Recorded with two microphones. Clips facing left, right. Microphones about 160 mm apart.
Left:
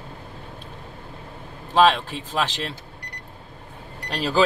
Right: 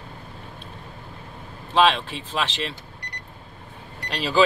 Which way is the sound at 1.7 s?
45° left (ahead or behind).